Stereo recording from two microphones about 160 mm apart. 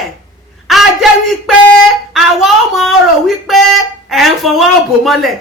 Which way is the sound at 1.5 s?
Centre (ahead or behind).